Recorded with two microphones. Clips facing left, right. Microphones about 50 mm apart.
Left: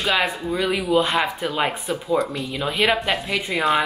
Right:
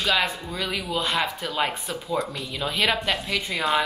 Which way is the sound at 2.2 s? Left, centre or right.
Centre.